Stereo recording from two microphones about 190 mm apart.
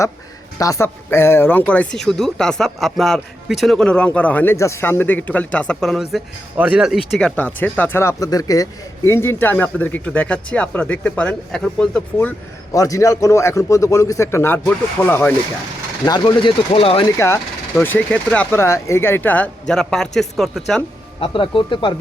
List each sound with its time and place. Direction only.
0.6 s speech: 15° left (ahead or behind)
12.7 s speech: 15° left (ahead or behind)
16.0 s speech: 25° left (ahead or behind)
17.2 s speech: 15° left (ahead or behind)
21.2 s speech: 25° left (ahead or behind)